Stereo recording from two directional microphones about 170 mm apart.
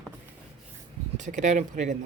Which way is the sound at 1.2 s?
45° right (ahead or behind).